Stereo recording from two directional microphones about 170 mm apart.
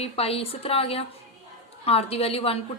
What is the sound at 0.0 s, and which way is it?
A woman's voice, 35° left (ahead or behind).